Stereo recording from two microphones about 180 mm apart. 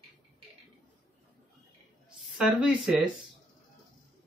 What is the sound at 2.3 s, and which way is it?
Speech, centre (ahead or behind).